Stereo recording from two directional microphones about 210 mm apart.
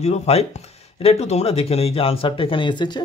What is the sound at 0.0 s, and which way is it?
Speech, 30° left (ahead or behind).